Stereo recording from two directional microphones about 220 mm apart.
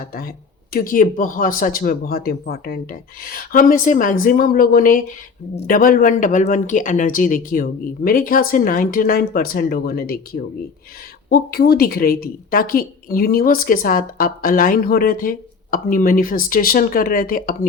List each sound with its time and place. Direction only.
0.0 s a woman's voice: 40° left (ahead or behind)